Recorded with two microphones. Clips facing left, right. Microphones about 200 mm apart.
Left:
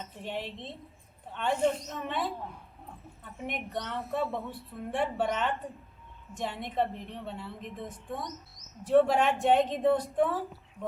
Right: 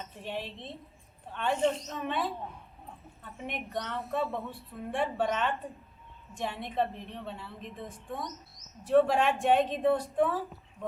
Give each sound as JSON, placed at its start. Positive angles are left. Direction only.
{"t": 0.3, "sound": "speech", "side_deg": 15}
{"t": 3.4, "sound": "speech", "side_deg": 15}
{"t": 8.9, "sound": "speech", "side_deg": 15}